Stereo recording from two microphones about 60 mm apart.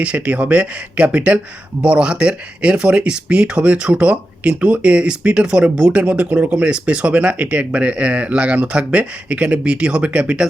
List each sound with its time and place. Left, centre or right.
0.0 s speech: right